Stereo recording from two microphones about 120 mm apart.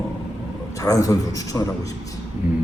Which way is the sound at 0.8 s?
30° left (ahead or behind).